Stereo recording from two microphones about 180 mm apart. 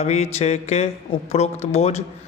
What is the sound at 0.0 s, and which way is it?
A man's voice, 35° left (ahead or behind).